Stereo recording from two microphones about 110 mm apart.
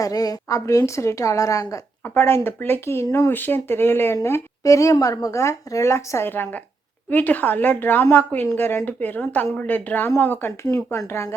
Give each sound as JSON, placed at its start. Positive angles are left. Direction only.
{"t": 0.0, "sound": "a woman's voice", "side_deg": 35}